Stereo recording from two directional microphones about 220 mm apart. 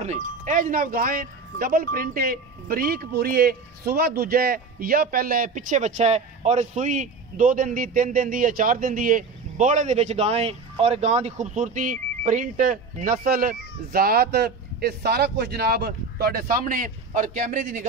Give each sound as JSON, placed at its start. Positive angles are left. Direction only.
{"t": 0.0, "sound": "a man's voice", "side_deg": -35}